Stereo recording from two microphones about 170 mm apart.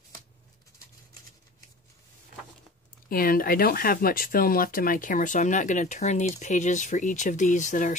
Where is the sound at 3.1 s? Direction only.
60° left (ahead or behind).